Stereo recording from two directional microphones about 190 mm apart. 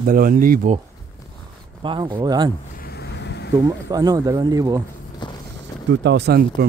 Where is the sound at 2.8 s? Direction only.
60° left (ahead or behind).